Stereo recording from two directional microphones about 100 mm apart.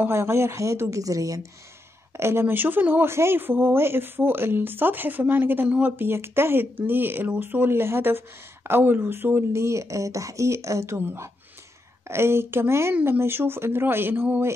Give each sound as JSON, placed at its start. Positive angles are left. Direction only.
{"t": 0.0, "sound": "speech", "side_deg": -25}